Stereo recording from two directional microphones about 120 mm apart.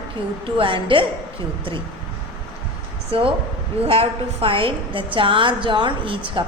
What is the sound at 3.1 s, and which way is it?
A woman's voice, 50° right (ahead or behind).